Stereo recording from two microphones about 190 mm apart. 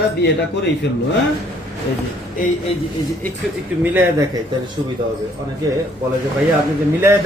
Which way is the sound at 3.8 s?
10° right (ahead or behind).